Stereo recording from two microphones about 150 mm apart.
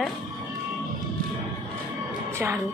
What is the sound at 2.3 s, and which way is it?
Speech, 20° right (ahead or behind).